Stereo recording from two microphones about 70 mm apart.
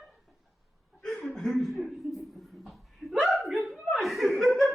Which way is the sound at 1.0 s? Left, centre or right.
Centre.